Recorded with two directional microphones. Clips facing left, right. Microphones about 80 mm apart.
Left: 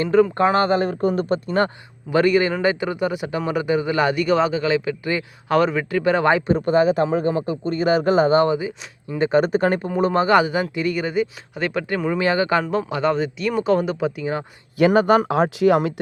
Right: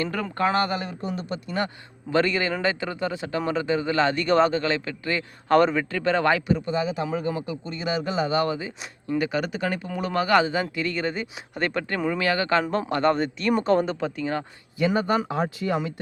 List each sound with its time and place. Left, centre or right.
0.0 s a man's voice: left
2.0 s a man's voice: centre
6.5 s speech: left
8.4 s speech: centre
9.1 s a man's voice: left
9.8 s speech: left; by 12.2 s centre
12.2 s speech: centre
12.9 s speech: centre
14.8 s speech: left